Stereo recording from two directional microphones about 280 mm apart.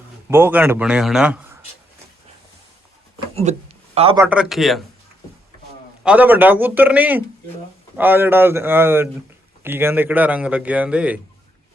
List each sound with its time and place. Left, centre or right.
0.3 s a man's voice: centre
3.5 s speech: right
4.3 s a man's voice: centre
6.0 s a man's voice: centre